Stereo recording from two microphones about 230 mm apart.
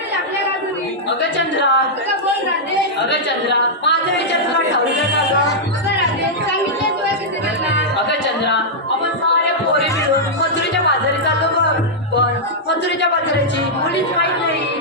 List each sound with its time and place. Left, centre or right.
1.4 s a woman's voice: left
3.0 s speech: left